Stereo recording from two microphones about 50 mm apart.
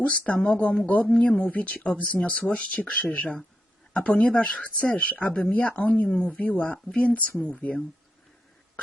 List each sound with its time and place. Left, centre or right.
0.0 s speech: left
6.1 s speech: left